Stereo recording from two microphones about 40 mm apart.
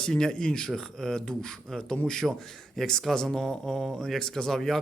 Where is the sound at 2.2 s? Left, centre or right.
Right.